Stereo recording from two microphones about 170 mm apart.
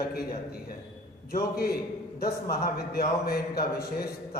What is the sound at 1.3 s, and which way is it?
A man's voice, 65° left (ahead or behind).